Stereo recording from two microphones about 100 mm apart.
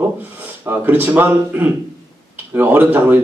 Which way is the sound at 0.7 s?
20° right (ahead or behind).